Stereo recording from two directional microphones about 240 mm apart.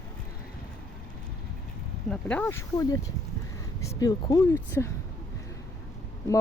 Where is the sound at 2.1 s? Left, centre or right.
Centre.